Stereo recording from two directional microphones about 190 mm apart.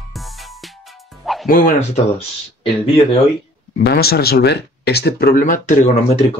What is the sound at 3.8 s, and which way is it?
Speech, 55° left (ahead or behind).